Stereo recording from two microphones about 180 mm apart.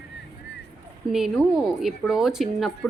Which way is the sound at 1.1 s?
Centre (ahead or behind).